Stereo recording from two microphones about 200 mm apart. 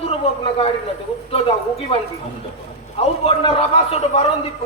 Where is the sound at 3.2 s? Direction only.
30° left (ahead or behind).